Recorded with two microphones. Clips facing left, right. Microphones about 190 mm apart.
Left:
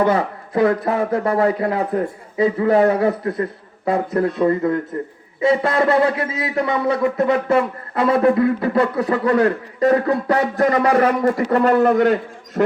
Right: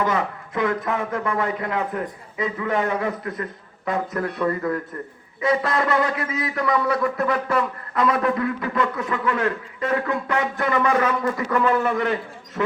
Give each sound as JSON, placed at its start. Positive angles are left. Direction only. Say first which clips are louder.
{"t": 0.1, "sound": "a man's voice", "louder": "left 6 dB", "side_deg": 35}